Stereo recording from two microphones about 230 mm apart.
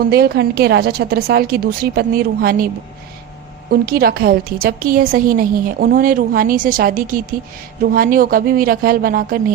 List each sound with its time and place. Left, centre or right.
0.1 s a woman's voice: right
3.7 s a woman's voice: right